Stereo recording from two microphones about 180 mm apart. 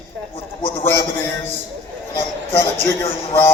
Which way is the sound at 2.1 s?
15° left (ahead or behind).